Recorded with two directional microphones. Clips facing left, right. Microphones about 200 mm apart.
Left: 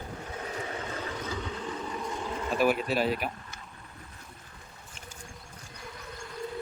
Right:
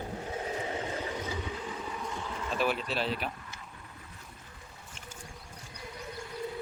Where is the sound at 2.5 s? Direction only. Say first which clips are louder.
Left 5 dB; 10° left (ahead or behind).